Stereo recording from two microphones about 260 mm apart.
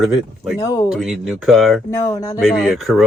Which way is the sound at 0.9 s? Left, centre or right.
Centre.